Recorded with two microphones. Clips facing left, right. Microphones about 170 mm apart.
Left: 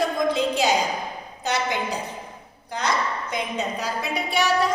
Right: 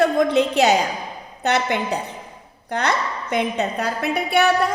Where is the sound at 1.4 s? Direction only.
60° right (ahead or behind).